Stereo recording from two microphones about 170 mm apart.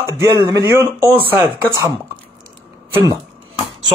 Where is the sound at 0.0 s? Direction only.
15° right (ahead or behind).